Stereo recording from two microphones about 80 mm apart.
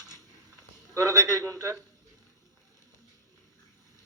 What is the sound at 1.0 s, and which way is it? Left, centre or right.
Speech, right.